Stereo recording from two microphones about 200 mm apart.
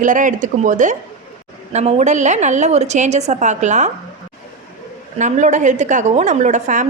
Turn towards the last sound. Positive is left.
turn(degrees=-40)  # may be behind; listen again after turning